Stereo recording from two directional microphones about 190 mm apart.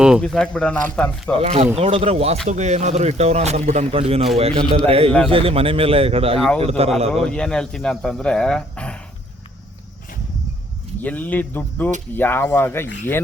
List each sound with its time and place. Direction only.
0.0 s speech: centre (ahead or behind)
1.4 s a man's voice: 35° right (ahead or behind)
7.1 s speech: 5° left (ahead or behind)
11.0 s speech: 10° left (ahead or behind)